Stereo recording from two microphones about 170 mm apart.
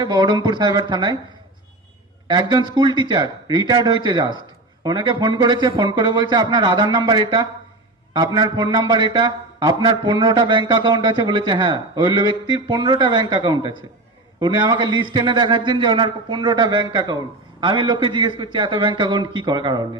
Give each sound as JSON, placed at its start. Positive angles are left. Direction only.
{"t": 0.0, "sound": "a man's voice", "side_deg": -25}
{"t": 2.2, "sound": "a man's voice", "side_deg": -25}